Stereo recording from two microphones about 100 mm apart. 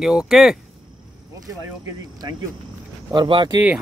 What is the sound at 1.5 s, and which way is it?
Speech, 35° right (ahead or behind).